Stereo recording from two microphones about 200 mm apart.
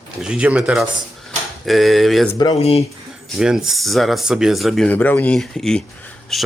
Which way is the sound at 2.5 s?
30° left (ahead or behind).